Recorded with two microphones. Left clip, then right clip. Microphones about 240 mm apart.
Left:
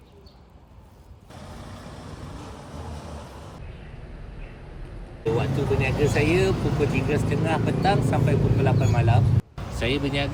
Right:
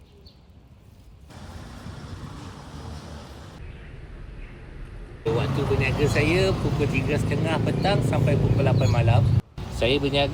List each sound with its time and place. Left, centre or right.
5.2 s speech: centre